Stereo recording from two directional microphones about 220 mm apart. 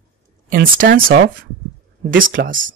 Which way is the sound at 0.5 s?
40° right (ahead or behind).